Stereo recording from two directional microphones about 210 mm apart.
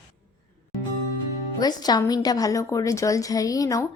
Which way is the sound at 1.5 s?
20° left (ahead or behind).